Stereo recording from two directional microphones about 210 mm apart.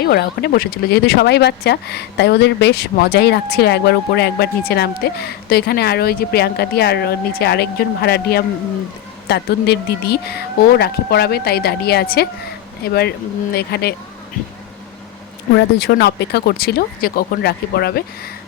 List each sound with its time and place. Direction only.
0.0 s speech: 50° left (ahead or behind)
15.5 s speech: 50° left (ahead or behind)